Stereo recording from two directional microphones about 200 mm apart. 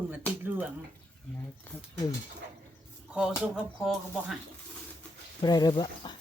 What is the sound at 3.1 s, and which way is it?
Speech, 5° right (ahead or behind).